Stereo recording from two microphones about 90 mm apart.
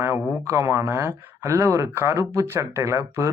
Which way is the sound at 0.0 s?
30° right (ahead or behind).